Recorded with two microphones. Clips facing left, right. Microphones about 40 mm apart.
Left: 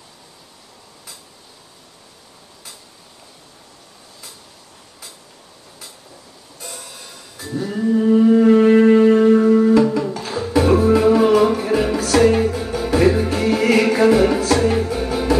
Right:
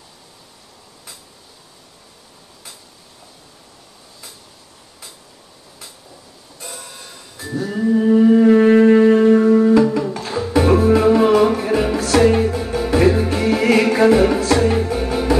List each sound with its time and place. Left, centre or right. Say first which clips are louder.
7.3 s music: right 1 dB; centre
7.6 s a sound: right 1 dB; centre
8.9 s music: right 1 dB; centre
10.1 s music: right 1 dB; centre